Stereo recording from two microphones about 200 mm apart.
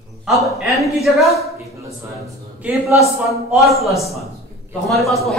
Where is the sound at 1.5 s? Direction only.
15° right (ahead or behind).